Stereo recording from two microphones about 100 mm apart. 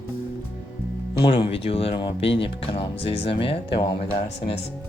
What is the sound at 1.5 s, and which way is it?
Speech, 75° left (ahead or behind).